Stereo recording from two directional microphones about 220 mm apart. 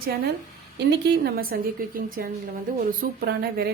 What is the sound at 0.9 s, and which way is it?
A woman's voice, 45° right (ahead or behind).